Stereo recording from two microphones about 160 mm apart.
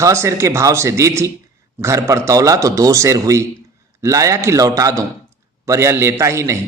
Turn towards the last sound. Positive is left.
turn(degrees=-15)  # may be behind; listen again after turning